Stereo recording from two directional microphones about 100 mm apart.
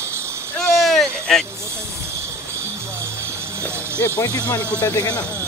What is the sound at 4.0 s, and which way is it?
Speech, 30° left (ahead or behind).